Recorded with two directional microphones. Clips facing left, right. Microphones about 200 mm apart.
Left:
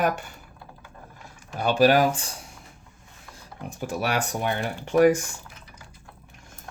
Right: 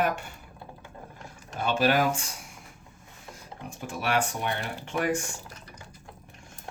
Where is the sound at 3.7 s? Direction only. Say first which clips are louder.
Left 2 dB; 40° left (ahead or behind).